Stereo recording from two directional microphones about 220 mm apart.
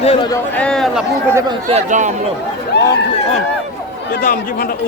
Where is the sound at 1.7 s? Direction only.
35° right (ahead or behind).